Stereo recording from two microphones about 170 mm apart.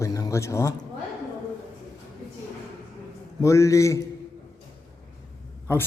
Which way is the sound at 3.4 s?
20° left (ahead or behind).